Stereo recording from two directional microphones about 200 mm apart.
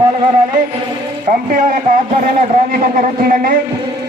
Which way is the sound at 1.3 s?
45° right (ahead or behind).